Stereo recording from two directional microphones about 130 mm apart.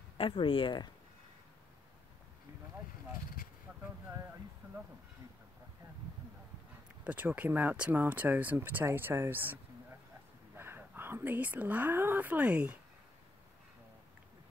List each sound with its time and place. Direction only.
0.2 s speech: 40° left (ahead or behind)
3.4 s a sound: 90° left
7.1 s speech: 15° right (ahead or behind)